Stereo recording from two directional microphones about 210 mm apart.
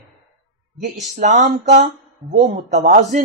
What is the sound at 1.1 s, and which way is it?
Speech, 35° right (ahead or behind).